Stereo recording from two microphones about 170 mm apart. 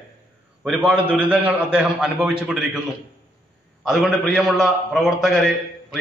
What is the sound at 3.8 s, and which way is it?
A man's voice, centre (ahead or behind).